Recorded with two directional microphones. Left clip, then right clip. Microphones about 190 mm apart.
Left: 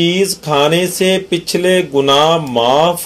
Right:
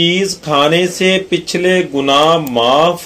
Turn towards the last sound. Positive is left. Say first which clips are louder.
# right 1 dB
turn(degrees=20)  # may be behind; listen again after turning